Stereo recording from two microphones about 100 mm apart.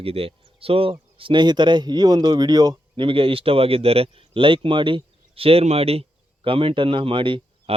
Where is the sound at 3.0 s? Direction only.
65° right (ahead or behind).